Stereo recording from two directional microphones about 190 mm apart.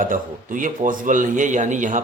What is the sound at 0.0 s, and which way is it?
A man's voice, 45° right (ahead or behind).